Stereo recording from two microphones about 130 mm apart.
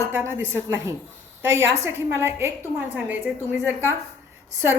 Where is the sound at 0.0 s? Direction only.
20° right (ahead or behind).